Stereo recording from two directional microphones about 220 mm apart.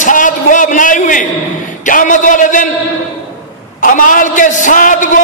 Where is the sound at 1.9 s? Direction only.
35° left (ahead or behind).